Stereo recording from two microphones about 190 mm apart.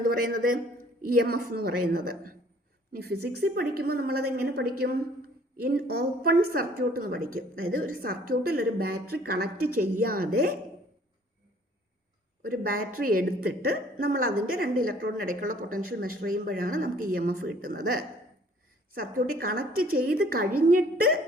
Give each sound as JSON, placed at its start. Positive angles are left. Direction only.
{"t": 0.0, "sound": "a woman's voice", "side_deg": -45}
{"t": 12.4, "sound": "speech", "side_deg": -50}